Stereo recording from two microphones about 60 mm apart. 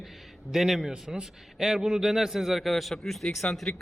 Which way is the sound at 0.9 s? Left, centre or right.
Centre.